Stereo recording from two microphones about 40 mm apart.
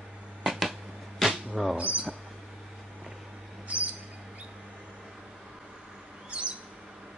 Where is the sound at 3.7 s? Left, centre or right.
Right.